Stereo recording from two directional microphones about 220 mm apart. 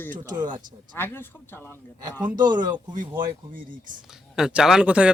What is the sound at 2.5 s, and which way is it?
Speech, 20° right (ahead or behind).